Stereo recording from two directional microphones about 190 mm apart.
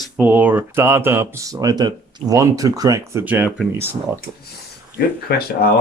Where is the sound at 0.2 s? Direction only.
10° right (ahead or behind).